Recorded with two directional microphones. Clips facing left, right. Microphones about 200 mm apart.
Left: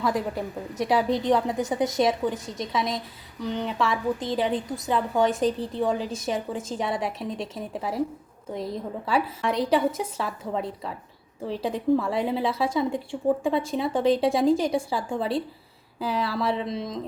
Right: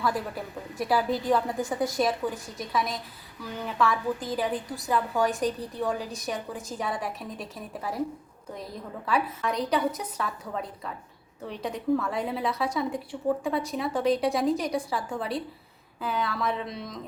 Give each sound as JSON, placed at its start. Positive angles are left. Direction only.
{"t": 0.0, "sound": "a woman's voice", "side_deg": 20}